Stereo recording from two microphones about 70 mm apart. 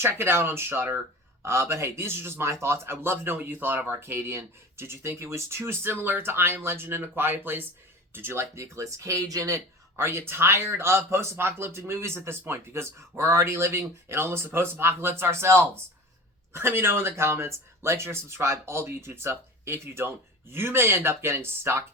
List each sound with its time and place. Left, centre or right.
0.0 s a man's voice: right
10.0 s a man's voice: right